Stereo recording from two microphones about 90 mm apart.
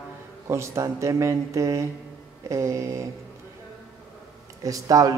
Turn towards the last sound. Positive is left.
turn(degrees=-40)  # may be behind; listen again after turning